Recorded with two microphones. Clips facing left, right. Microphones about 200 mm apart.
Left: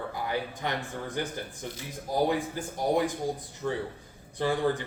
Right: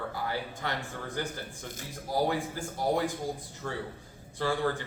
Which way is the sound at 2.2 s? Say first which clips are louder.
Left 2 dB; 20° left (ahead or behind).